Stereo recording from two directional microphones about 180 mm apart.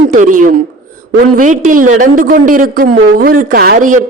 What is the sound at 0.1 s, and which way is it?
Speech, 45° right (ahead or behind).